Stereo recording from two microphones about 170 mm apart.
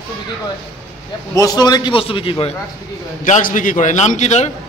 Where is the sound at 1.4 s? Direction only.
20° left (ahead or behind).